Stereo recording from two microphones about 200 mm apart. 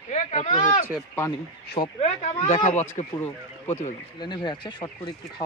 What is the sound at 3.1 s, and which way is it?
Speech, 10° left (ahead or behind).